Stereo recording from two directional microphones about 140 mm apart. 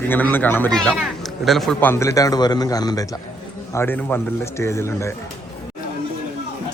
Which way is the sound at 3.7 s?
15° left (ahead or behind).